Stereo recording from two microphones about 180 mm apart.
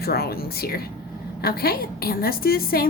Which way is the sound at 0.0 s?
60° left (ahead or behind).